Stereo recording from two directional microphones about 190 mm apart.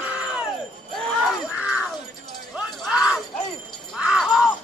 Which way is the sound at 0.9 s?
Centre (ahead or behind).